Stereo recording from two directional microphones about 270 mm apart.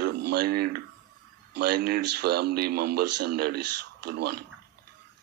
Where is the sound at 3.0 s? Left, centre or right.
Right.